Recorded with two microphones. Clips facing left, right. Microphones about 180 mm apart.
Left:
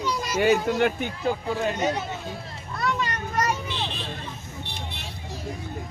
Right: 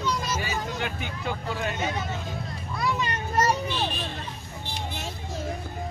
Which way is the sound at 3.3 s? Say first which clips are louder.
Right 3 dB; 30° right (ahead or behind).